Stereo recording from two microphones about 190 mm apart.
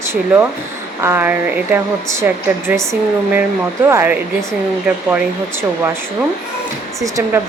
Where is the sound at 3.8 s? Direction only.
10° right (ahead or behind).